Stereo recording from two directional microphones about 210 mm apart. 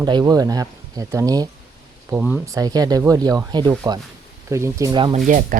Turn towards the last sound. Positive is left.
turn(degrees=-40)  # may be behind; listen again after turning